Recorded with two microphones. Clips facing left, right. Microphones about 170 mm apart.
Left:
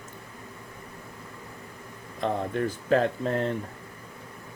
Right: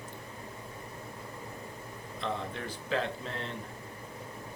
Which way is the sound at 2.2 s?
45° left (ahead or behind).